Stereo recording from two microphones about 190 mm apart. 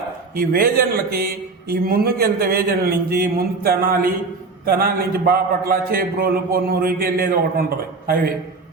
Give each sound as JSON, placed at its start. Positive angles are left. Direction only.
{"t": 0.3, "sound": "a man's voice", "side_deg": -50}